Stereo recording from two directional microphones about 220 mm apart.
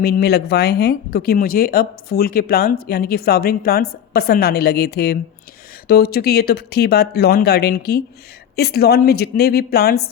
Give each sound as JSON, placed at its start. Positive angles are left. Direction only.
{"t": 0.0, "sound": "speech", "side_deg": 45}